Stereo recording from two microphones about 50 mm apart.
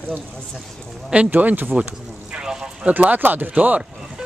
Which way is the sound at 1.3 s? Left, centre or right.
Right.